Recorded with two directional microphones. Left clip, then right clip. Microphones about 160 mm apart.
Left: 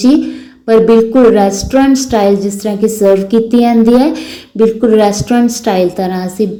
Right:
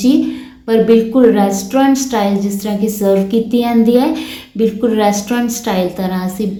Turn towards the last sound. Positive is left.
turn(degrees=35)  # may be behind; listen again after turning